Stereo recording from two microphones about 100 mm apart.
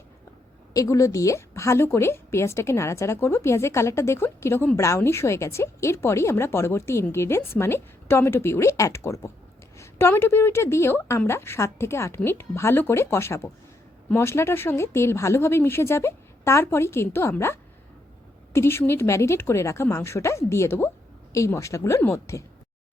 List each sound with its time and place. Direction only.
0.7 s speech: 35° left (ahead or behind)